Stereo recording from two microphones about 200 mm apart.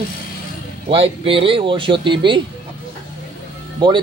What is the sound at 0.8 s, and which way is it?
Speech, 30° right (ahead or behind).